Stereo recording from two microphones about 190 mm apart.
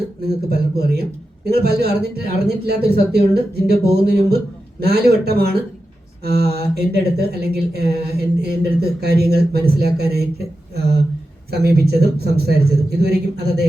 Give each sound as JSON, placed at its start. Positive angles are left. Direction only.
{"t": 0.2, "sound": "speech", "side_deg": -55}